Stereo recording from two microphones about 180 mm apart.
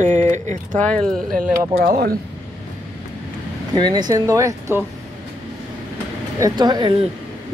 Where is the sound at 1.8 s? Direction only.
60° right (ahead or behind).